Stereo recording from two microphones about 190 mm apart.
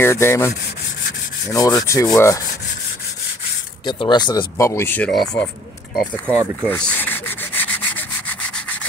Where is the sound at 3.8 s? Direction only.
25° left (ahead or behind); by 5.5 s 5° left (ahead or behind).